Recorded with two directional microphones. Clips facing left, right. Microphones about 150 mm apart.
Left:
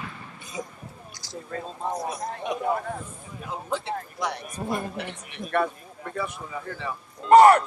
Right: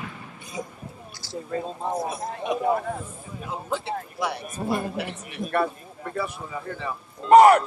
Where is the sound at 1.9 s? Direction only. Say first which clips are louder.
Right 3 dB; 25° right (ahead or behind).